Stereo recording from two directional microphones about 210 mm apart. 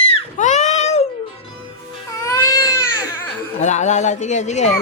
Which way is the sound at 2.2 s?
15° left (ahead or behind).